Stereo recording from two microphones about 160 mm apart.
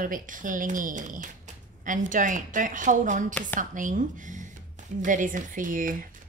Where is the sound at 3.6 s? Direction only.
55° right (ahead or behind).